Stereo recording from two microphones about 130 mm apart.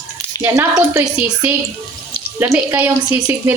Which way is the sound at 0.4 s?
20° right (ahead or behind).